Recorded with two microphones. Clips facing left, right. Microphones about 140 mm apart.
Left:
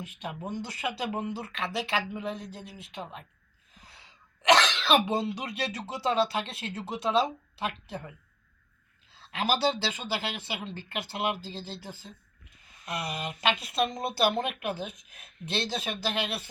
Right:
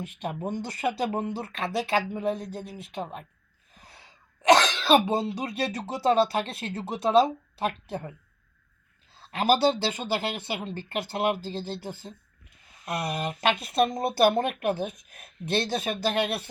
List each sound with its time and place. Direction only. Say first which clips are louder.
0.0 s speech: right 5 dB; 50° right (ahead or behind)
3.8 s cough: right 2 dB; 50° right (ahead or behind)
5.9 s speech: right 5 dB; 45° right (ahead or behind)
9.1 s speech: right 6 dB; 50° right (ahead or behind)